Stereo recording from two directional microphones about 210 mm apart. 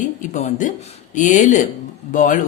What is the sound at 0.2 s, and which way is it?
A woman's voice, 35° left (ahead or behind).